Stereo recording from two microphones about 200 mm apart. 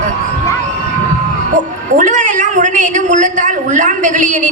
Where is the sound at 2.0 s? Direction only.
35° right (ahead or behind).